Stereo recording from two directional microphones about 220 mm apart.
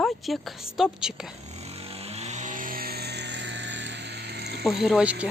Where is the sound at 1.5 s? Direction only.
25° right (ahead or behind); by 4.6 s 50° right (ahead or behind).